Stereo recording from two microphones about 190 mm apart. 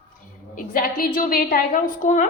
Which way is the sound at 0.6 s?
50° left (ahead or behind).